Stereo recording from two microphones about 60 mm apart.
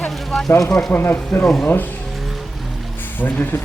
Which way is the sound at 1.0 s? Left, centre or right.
Left.